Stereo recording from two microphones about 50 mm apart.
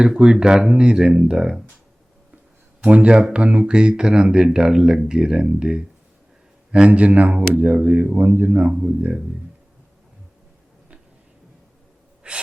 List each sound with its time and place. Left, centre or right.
0.0 s speech: centre
2.9 s speech: right
12.2 s gasp: right